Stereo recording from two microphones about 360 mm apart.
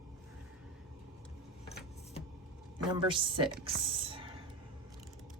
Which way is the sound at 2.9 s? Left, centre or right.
Centre.